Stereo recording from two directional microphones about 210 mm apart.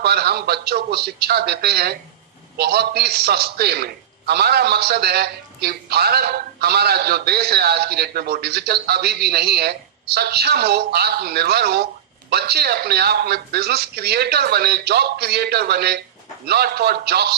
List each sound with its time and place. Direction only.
0.0 s a man's voice: 50° right (ahead or behind)